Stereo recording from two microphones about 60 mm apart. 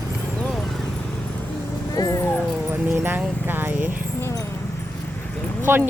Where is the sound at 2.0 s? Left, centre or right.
Left.